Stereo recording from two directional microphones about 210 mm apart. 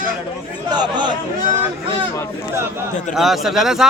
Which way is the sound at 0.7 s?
20° right (ahead or behind).